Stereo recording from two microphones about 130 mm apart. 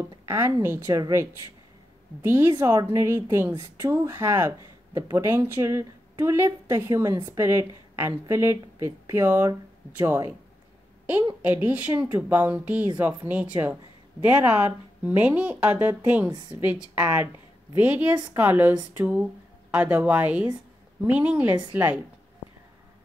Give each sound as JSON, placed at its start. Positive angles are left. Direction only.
{"t": 0.2, "sound": "speech", "side_deg": -20}
{"t": 11.4, "sound": "speech", "side_deg": -10}
{"t": 16.3, "sound": "a woman's voice", "side_deg": -35}
{"t": 16.6, "sound": "speech", "side_deg": -10}